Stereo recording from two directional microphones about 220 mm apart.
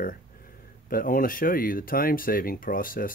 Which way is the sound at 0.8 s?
40° left (ahead or behind).